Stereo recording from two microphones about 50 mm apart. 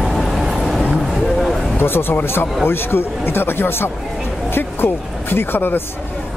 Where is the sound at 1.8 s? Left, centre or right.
Left.